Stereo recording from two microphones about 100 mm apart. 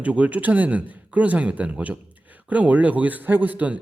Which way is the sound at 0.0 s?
15° right (ahead or behind).